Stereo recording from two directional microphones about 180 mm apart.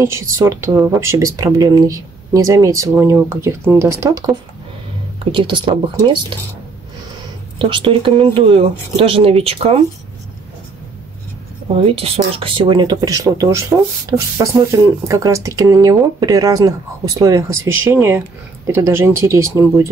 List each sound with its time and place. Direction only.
0.0 s speech: 15° right (ahead or behind)
7.5 s speech: 30° right (ahead or behind)
11.7 s speech: 35° right (ahead or behind); by 19.9 s 15° right (ahead or behind)